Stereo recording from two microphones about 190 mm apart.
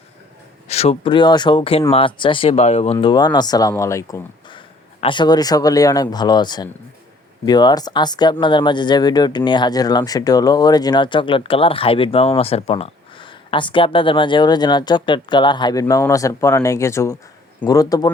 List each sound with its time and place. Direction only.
0.7 s speech: 35° left (ahead or behind)